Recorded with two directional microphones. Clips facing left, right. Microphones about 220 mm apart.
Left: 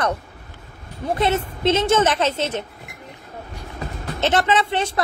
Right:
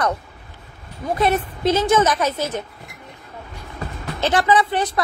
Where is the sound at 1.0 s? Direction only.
25° left (ahead or behind).